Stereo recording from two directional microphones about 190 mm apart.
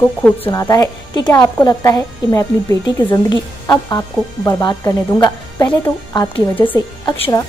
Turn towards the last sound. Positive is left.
turn(degrees=15)  # may be behind; listen again after turning